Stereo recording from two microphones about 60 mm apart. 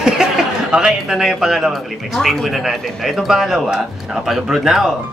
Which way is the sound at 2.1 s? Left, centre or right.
Centre.